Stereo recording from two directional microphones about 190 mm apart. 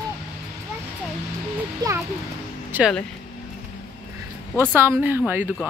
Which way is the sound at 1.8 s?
20° right (ahead or behind).